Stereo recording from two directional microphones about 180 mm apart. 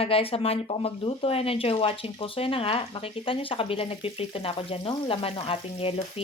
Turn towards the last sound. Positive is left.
turn(degrees=30)  # may be behind; listen again after turning